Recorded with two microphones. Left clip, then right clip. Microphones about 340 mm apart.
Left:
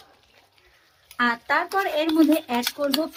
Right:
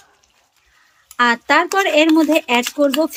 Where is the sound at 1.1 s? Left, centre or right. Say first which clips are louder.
Right 8 dB; right.